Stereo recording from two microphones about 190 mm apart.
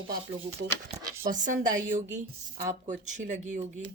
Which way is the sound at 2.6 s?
40° right (ahead or behind).